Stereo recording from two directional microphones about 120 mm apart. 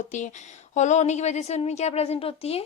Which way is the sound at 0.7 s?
80° left.